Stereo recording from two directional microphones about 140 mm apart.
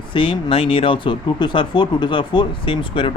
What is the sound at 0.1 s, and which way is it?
Speech, 40° left (ahead or behind).